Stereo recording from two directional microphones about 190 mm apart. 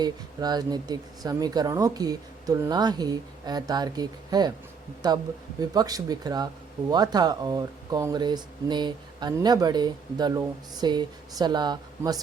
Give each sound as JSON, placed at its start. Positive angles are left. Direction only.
{"t": 0.0, "sound": "speech", "side_deg": -20}